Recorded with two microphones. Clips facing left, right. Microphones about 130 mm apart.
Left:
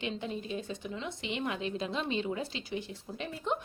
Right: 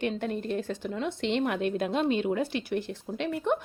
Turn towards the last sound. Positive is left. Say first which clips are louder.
# right 7 dB
turn(degrees=-65)  # may be behind; listen again after turning